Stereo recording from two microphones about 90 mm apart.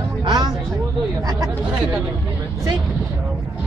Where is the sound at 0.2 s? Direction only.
50° right (ahead or behind).